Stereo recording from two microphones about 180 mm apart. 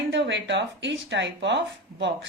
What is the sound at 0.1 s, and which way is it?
Speech, 85° right.